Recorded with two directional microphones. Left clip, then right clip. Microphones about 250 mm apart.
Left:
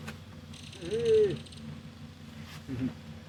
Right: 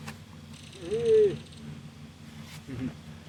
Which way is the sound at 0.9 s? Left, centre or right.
Left.